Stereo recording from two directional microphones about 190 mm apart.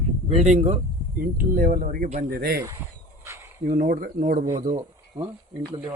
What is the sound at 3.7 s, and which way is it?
Speech, 50° right (ahead or behind).